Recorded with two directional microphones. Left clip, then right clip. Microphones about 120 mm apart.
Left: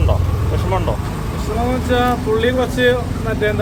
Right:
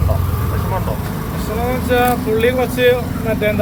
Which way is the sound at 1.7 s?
20° left (ahead or behind).